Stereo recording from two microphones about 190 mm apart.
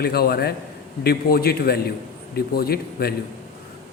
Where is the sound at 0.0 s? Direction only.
55° left (ahead or behind).